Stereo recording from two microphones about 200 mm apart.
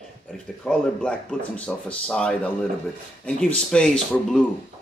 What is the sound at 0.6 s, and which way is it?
Speech, 5° left (ahead or behind).